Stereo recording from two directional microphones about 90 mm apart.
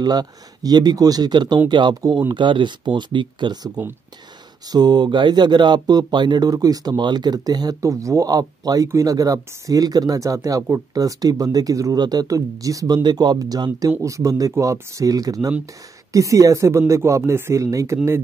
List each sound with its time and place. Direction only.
0.0 s speech: 50° right (ahead or behind)
17.9 s speech: 25° right (ahead or behind)